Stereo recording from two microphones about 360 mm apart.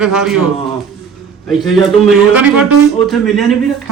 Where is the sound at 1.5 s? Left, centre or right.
Centre.